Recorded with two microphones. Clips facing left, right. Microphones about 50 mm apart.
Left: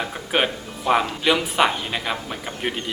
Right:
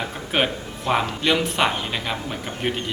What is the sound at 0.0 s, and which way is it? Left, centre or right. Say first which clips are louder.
Speech: left 1 dB; centre.